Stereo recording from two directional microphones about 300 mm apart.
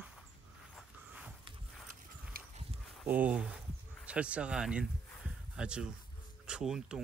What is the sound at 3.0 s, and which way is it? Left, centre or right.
Speech, centre.